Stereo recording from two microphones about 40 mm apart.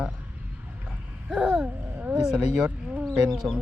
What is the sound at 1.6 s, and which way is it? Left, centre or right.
Speech, right.